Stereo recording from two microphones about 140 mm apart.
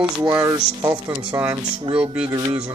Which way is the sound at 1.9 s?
10° right (ahead or behind).